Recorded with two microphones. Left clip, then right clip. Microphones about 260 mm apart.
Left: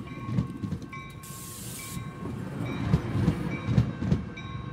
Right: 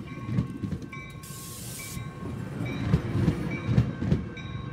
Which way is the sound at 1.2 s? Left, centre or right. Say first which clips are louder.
Even; centre.